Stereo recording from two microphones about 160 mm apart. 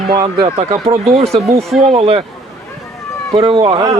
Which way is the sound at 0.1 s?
25° right (ahead or behind).